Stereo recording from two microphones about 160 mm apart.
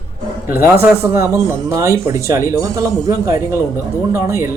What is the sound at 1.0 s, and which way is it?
Speech, 15° right (ahead or behind).